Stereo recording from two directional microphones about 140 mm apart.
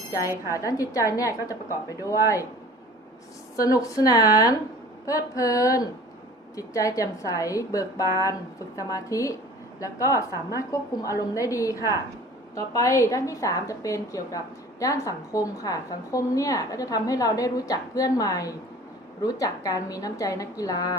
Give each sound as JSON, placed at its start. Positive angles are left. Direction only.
{"t": 0.5, "sound": "a woman's voice", "side_deg": 25}
{"t": 3.6, "sound": "a woman's voice", "side_deg": 25}